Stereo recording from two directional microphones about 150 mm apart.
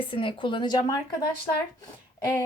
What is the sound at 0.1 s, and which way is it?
A woman's voice, 35° left (ahead or behind).